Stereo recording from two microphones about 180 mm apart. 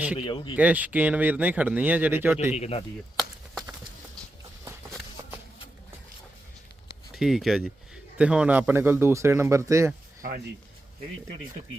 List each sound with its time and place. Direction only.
0.2 s speech: 25° left (ahead or behind)
0.5 s speech: 10° right (ahead or behind)
2.5 s speech: 35° left (ahead or behind)
3.2 s a sound: centre (ahead or behind)
7.1 s speech: centre (ahead or behind)
10.2 s speech: 50° right (ahead or behind)